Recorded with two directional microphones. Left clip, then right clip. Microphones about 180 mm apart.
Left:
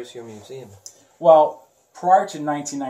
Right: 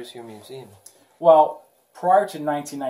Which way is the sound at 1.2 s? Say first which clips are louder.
Left 1 dB; 20° left (ahead or behind).